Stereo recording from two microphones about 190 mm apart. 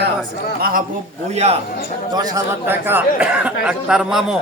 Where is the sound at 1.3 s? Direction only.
35° right (ahead or behind).